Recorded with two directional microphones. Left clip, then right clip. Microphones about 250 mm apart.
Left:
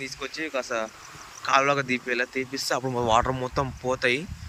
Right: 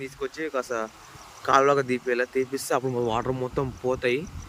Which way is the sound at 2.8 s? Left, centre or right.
Centre.